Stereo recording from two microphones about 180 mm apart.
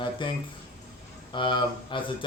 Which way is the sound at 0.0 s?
25° left (ahead or behind).